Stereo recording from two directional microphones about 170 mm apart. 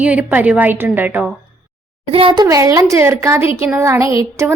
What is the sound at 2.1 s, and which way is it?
A woman's voice, 30° right (ahead or behind).